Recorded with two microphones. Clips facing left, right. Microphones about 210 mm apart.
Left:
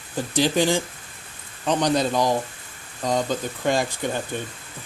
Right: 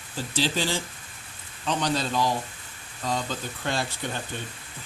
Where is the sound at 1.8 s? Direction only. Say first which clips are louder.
Left 5 dB; 20° left (ahead or behind).